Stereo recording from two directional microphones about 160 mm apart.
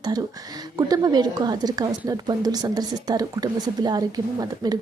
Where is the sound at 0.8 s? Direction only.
25° right (ahead or behind).